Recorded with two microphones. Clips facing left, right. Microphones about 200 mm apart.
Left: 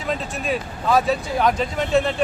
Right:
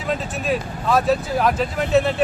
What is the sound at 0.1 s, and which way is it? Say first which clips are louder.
Speech: right 2 dB; centre (ahead or behind).